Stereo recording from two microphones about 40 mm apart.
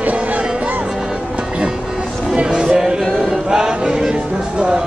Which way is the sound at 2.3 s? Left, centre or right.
Right.